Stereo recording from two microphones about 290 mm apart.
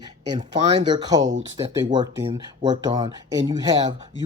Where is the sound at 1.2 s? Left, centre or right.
Right.